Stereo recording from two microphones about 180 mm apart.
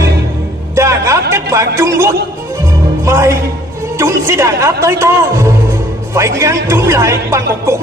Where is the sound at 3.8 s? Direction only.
15° right (ahead or behind).